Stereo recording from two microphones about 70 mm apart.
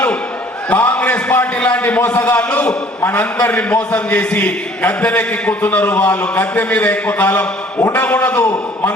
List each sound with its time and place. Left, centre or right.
0.7 s a man's voice: left